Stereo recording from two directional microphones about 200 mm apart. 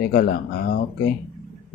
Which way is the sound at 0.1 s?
50° left (ahead or behind).